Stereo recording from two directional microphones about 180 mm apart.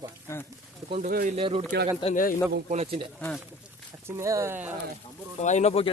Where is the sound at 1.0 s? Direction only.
50° right (ahead or behind).